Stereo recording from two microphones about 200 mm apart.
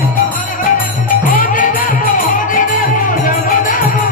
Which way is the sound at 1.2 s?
45° left (ahead or behind).